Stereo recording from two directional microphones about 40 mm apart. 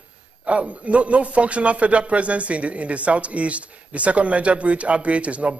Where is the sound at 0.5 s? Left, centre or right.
Right.